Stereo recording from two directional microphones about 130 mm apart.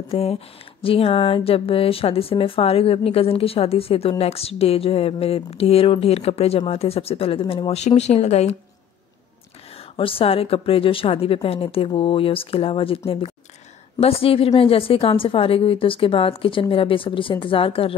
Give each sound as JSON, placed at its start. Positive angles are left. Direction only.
{"t": 0.1, "sound": "a woman's voice", "side_deg": 50}
{"t": 9.9, "sound": "a woman's voice", "side_deg": 45}